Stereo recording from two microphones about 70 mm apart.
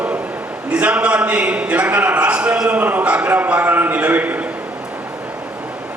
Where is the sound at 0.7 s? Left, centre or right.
Centre.